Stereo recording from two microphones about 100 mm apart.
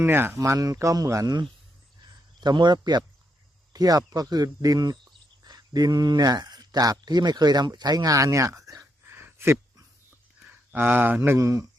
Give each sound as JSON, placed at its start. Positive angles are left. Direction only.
{"t": 0.0, "sound": "speech", "side_deg": -25}
{"t": 10.4, "sound": "a sound", "side_deg": -15}
{"t": 11.2, "sound": "speech", "side_deg": -30}